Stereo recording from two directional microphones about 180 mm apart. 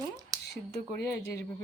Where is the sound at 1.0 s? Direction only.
15° left (ahead or behind).